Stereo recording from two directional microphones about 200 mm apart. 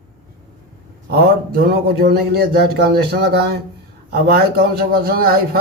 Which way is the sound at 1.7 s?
50° right (ahead or behind).